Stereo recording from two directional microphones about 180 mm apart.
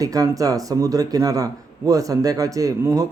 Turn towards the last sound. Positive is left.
turn(degrees=-20)  # may be behind; listen again after turning